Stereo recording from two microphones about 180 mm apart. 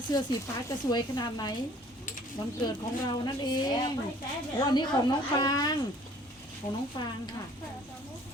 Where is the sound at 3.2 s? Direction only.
20° left (ahead or behind).